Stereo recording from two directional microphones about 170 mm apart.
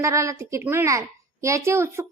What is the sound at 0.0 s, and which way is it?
A woman's voice, 15° right (ahead or behind).